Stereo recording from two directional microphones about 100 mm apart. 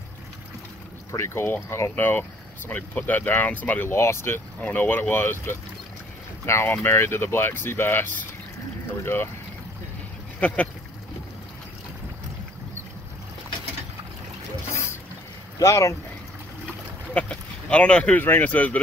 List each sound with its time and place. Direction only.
1.1 s speech: 25° left (ahead or behind)
10.4 s speech: 15° left (ahead or behind)
14.7 s a sound: 30° left (ahead or behind)
15.6 s speech: 30° left (ahead or behind)
17.1 s speech: 10° left (ahead or behind)